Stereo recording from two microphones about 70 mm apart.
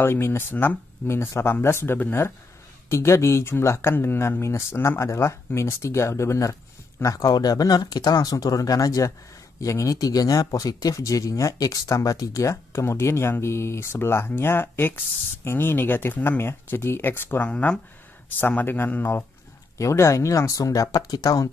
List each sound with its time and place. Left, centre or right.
0.0 s speech: left
7.3 s speech: left
19.8 s speech: left